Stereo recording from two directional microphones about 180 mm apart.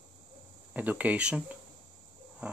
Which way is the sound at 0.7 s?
10° right (ahead or behind).